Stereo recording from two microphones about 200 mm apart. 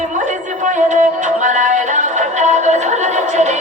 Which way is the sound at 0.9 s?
40° right (ahead or behind).